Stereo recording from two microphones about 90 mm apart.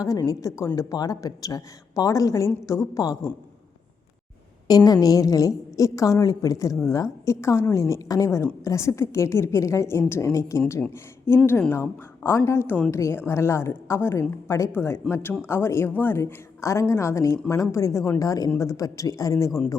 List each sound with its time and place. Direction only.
0.0 s a woman's voice: 40° left (ahead or behind)
4.7 s a woman's voice: 45° left (ahead or behind)